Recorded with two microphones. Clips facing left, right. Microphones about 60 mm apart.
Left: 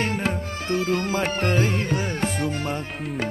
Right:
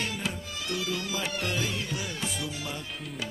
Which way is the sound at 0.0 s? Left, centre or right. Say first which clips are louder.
Left 8 dB; left.